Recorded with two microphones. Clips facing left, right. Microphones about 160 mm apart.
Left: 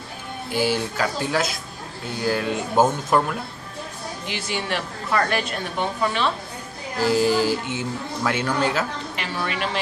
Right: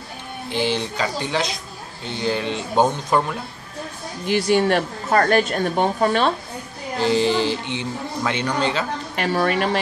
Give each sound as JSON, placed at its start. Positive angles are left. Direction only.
{"t": 0.5, "sound": "speech", "side_deg": 10}
{"t": 4.3, "sound": "a woman's voice", "side_deg": -45}
{"t": 7.0, "sound": "speech", "side_deg": 5}
{"t": 9.1, "sound": "a woman's voice", "side_deg": -50}